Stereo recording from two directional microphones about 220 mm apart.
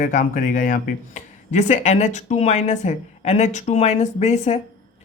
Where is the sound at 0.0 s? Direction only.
35° left (ahead or behind).